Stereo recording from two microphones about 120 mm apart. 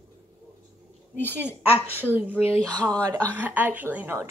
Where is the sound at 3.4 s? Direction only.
15° right (ahead or behind).